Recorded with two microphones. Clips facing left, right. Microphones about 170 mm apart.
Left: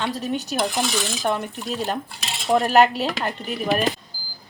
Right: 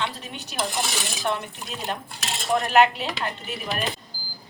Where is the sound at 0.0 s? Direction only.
40° left (ahead or behind).